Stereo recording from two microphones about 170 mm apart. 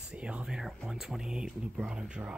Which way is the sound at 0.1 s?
5° right (ahead or behind).